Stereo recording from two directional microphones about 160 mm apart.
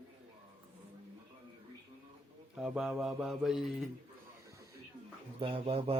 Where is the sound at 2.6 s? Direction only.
Centre (ahead or behind).